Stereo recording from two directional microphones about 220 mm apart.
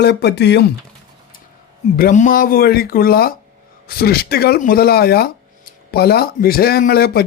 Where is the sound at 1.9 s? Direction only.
35° left (ahead or behind).